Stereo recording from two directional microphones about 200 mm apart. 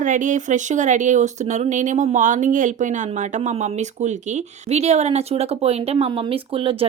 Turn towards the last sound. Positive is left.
turn(degrees=-25)  # may be behind; listen again after turning